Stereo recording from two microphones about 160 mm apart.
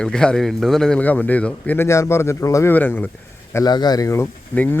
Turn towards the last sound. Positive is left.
turn(degrees=10)  # may be behind; listen again after turning